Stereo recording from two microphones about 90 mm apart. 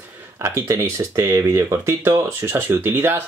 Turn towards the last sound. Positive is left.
turn(degrees=-25)  # may be behind; listen again after turning